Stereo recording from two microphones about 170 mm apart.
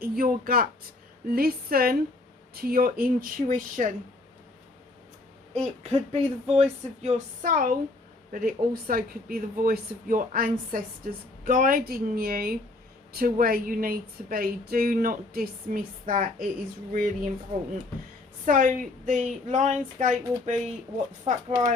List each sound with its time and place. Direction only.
0.0 s speech: 60° right (ahead or behind)
5.5 s a woman's voice: 40° right (ahead or behind); by 17.3 s 55° right (ahead or behind)
18.4 s a woman's voice: 50° right (ahead or behind)